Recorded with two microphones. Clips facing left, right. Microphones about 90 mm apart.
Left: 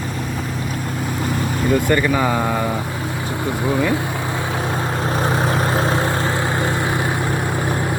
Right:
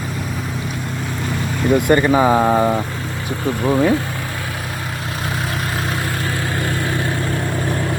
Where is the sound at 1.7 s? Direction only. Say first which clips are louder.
Right 5 dB; 20° right (ahead or behind).